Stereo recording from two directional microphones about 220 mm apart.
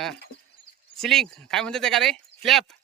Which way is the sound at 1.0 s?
Centre (ahead or behind).